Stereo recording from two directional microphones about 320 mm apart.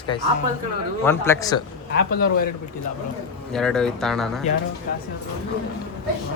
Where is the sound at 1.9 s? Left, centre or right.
Left.